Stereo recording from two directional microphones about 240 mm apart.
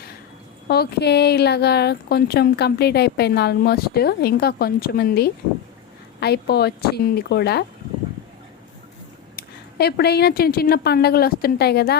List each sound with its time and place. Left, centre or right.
0.7 s speech: left
9.3 s a woman's voice: left